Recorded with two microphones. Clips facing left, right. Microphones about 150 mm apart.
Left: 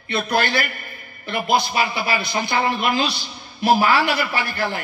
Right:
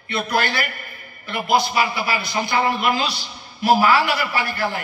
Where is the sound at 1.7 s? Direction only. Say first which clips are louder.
Even; 25° left (ahead or behind).